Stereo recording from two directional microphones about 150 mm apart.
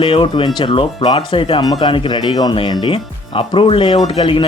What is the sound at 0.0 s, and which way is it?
Speech, 35° left (ahead or behind).